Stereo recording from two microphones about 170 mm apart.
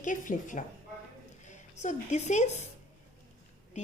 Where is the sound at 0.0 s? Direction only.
50° left (ahead or behind).